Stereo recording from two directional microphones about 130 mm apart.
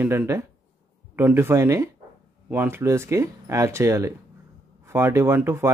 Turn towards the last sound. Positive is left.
turn(degrees=-20)  # may be behind; listen again after turning